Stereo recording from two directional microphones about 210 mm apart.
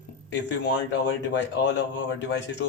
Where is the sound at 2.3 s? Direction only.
55° left (ahead or behind).